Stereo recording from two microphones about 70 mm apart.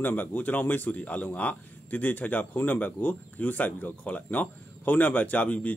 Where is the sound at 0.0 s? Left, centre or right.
Left.